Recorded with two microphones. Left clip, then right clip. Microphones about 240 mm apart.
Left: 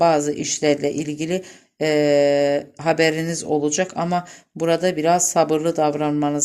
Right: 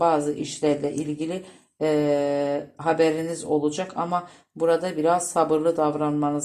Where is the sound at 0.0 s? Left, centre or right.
Left.